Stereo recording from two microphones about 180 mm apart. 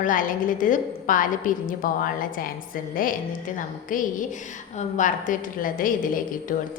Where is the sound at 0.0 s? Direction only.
50° left (ahead or behind).